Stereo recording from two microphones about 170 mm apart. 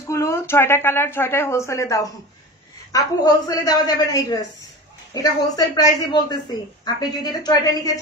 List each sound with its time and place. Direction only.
0.1 s a woman's voice: 15° left (ahead or behind)